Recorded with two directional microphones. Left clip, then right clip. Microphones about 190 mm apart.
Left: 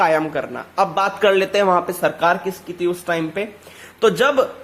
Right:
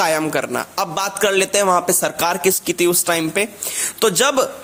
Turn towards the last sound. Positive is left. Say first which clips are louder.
# left 1 dB
turn(degrees=-30)  # may be behind; listen again after turning